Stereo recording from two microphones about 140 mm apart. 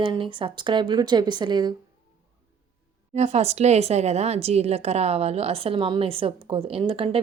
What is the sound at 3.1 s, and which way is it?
A woman's voice, 50° right (ahead or behind).